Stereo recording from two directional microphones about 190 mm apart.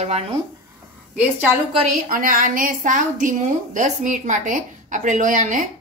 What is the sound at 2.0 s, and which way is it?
Speech, 45° right (ahead or behind).